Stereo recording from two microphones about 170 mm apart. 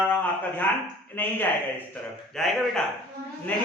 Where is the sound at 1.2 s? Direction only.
10° left (ahead or behind).